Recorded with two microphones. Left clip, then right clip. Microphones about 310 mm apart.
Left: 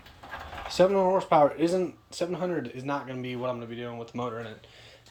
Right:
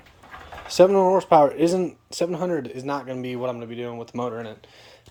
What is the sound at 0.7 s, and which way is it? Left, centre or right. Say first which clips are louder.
Speech: right 6 dB; right.